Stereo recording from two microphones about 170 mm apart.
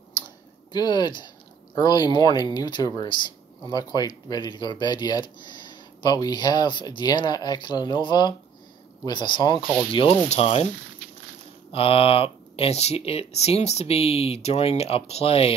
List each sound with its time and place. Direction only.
0.7 s speech: 25° left (ahead or behind)
11.7 s speech: 35° left (ahead or behind)